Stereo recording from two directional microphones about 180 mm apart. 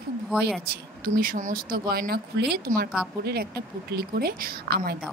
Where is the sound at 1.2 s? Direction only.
50° right (ahead or behind).